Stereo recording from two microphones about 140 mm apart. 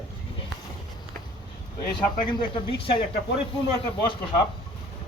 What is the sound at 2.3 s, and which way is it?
Speech, 35° left (ahead or behind).